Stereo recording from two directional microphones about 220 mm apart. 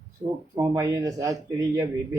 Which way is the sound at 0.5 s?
15° right (ahead or behind).